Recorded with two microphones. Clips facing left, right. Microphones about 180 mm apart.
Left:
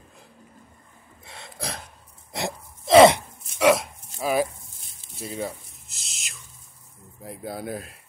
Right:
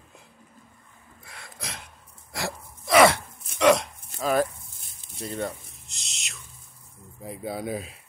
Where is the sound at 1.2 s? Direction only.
25° left (ahead or behind).